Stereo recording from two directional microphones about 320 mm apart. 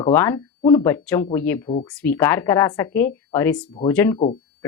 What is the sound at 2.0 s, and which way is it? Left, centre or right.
Speech, centre.